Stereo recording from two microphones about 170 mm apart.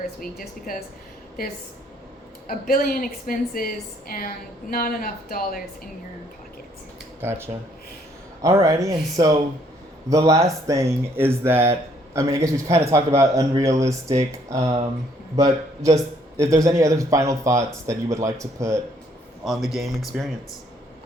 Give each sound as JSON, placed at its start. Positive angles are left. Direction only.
{"t": 0.2, "sound": "a woman's voice", "side_deg": 55}
{"t": 2.5, "sound": "a woman's voice", "side_deg": 60}
{"t": 7.2, "sound": "speech", "side_deg": -15}
{"t": 20.1, "sound": "speech", "side_deg": -5}